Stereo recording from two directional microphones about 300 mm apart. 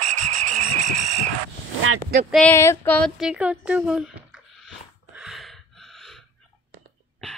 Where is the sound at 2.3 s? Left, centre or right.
Centre.